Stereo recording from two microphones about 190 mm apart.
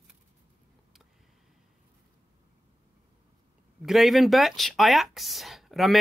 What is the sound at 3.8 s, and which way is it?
Speech, centre (ahead or behind).